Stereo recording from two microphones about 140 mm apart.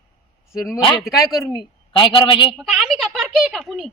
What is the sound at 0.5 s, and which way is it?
Speech, 20° left (ahead or behind).